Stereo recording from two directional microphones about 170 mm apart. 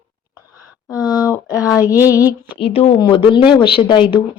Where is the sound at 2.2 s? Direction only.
30° left (ahead or behind).